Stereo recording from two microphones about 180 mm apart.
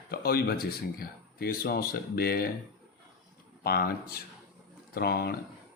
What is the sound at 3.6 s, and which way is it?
Speech, 55° left (ahead or behind).